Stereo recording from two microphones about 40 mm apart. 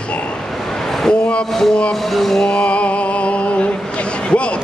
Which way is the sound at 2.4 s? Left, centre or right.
Left.